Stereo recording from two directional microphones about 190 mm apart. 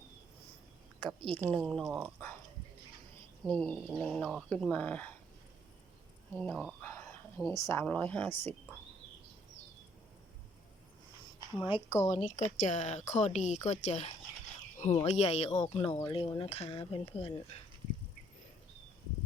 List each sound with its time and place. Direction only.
1.0 s a woman's voice: 25° right (ahead or behind)
1.5 s speech: 5° left (ahead or behind)
3.4 s speech: 5° left (ahead or behind)
6.3 s speech: 10° left (ahead or behind)
6.8 s a sound: 15° left (ahead or behind)
7.7 s speech: 10° left (ahead or behind)
11.5 s a woman's voice: 25° left (ahead or behind)